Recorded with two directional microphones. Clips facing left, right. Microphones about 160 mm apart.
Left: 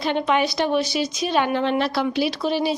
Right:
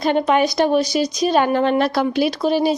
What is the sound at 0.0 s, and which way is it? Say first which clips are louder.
Speech: right 4 dB; 45° right (ahead or behind).